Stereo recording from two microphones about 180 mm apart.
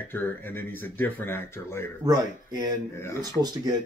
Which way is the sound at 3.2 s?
20° right (ahead or behind).